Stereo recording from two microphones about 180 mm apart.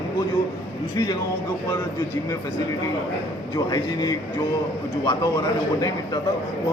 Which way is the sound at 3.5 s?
20° left (ahead or behind).